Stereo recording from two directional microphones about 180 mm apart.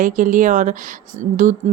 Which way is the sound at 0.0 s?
45° right (ahead or behind).